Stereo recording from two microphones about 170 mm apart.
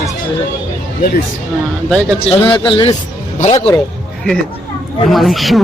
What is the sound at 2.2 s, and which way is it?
Speech, 30° left (ahead or behind).